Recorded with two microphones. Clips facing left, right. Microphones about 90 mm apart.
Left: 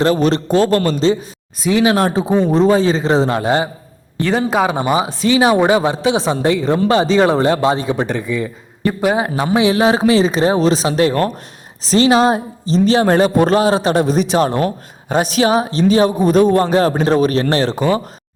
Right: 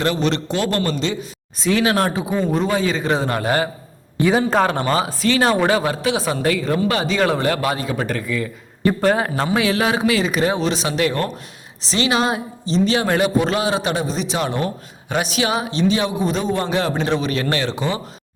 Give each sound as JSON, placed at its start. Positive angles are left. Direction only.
{"t": 0.0, "sound": "a man's voice", "side_deg": 35}
{"t": 1.5, "sound": "a man's voice", "side_deg": 10}
{"t": 1.8, "sound": "speech", "side_deg": 20}
{"t": 4.2, "sound": "a man's voice", "side_deg": -5}
{"t": 4.4, "sound": "speech", "side_deg": 10}
{"t": 8.9, "sound": "a man's voice", "side_deg": 10}
{"t": 14.0, "sound": "a man's voice", "side_deg": 55}
{"t": 14.3, "sound": "a man's voice", "side_deg": 40}